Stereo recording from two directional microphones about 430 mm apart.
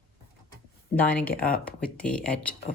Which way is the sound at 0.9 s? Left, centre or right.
Centre.